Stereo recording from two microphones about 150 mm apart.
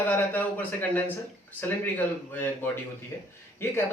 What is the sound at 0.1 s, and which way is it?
Speech, 10° left (ahead or behind).